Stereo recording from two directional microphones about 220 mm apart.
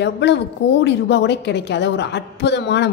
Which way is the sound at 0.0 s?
50° left (ahead or behind).